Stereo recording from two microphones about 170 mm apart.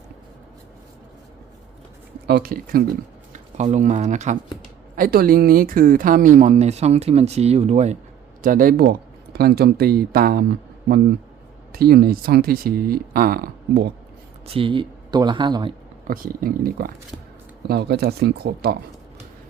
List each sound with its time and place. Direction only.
2.2 s speech: 65° right (ahead or behind)
3.3 s speech: 40° right (ahead or behind)
4.9 s speech: 60° right (ahead or behind); by 7.9 s 40° right (ahead or behind)
8.4 s speech: 55° right (ahead or behind)
11.7 s speech: 65° right (ahead or behind)
14.4 s speech: 30° right (ahead or behind)
16.0 s speech: 55° right (ahead or behind)